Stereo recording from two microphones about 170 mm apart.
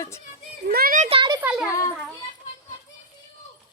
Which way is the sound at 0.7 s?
55° right (ahead or behind).